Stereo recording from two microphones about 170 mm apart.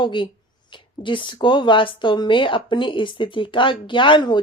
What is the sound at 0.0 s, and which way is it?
Speech, 30° left (ahead or behind).